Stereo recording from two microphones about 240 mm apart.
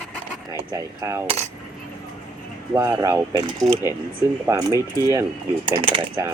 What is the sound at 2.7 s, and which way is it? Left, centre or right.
Speech, centre.